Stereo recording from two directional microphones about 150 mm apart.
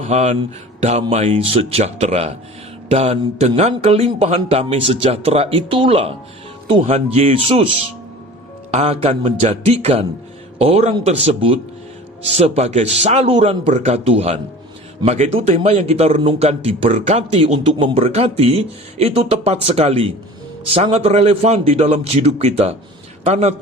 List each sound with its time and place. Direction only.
0.0 s a man's voice: 50° right (ahead or behind)
8.7 s a man's voice: 40° right (ahead or behind)
12.4 s a man's voice: 45° right (ahead or behind)